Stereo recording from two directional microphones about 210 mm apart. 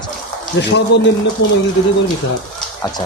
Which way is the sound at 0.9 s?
55° left (ahead or behind).